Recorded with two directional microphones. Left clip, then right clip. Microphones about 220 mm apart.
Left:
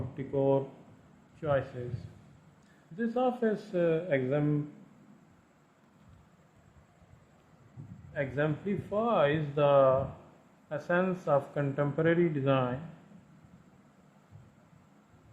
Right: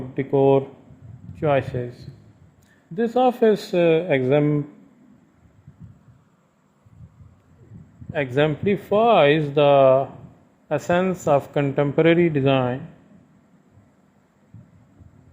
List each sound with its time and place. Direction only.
0.2 s a man's voice: 35° right (ahead or behind)
2.9 s speech: 40° right (ahead or behind)
8.1 s speech: 40° right (ahead or behind)